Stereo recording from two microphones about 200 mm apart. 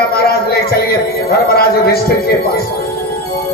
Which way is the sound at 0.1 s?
50° left (ahead or behind).